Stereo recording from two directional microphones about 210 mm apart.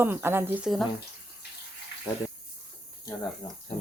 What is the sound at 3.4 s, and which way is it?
Speech, 20° left (ahead or behind).